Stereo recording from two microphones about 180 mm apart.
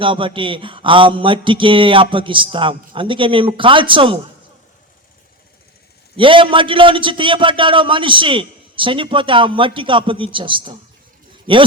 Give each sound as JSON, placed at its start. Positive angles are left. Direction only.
{"t": 0.0, "sound": "a man's voice", "side_deg": -30}
{"t": 6.1, "sound": "a man's voice", "side_deg": -30}